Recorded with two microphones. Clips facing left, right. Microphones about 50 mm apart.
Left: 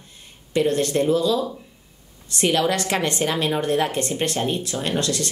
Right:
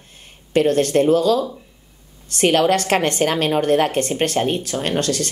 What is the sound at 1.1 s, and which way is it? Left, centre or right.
Speech, right.